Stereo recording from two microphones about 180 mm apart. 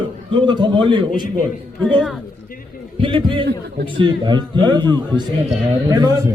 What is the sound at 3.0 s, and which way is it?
Speech, 30° right (ahead or behind).